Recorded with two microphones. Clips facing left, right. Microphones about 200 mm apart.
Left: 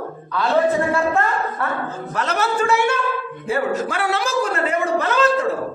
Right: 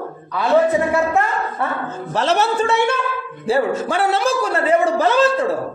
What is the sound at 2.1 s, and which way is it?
A woman's voice, 30° right (ahead or behind).